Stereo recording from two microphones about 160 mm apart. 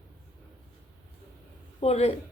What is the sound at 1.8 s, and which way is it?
Speech, 40° left (ahead or behind).